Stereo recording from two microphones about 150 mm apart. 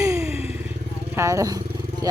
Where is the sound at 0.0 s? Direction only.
20° right (ahead or behind).